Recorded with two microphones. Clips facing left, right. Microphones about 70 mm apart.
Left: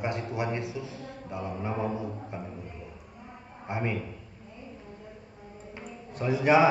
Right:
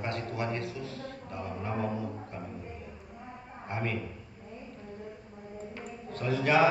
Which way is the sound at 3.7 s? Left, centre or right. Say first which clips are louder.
Left 3 dB; centre.